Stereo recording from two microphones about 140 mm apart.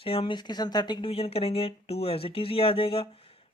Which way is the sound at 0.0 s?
40° left (ahead or behind).